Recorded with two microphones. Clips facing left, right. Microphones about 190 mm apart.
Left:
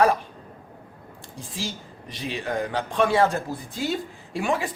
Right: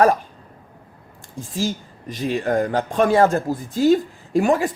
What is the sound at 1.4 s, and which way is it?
Speech, 45° right (ahead or behind).